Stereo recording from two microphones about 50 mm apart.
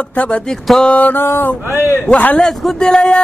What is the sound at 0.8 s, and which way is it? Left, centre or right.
Speech, left.